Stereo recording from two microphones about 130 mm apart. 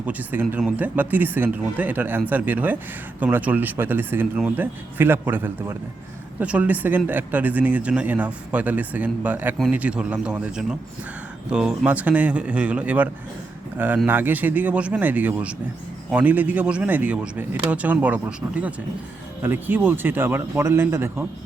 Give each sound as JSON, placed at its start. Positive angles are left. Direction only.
{"t": 0.0, "sound": "speech", "side_deg": -15}